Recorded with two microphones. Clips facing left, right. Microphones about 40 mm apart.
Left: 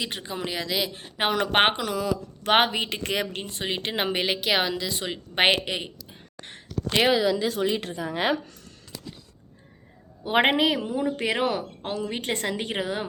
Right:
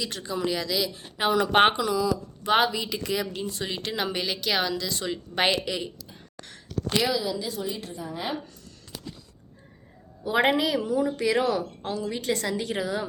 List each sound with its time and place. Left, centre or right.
0.0 s speech: left
1.8 s speech: left
3.4 s speech: left
5.1 s a woman's voice: left
10.2 s speech: left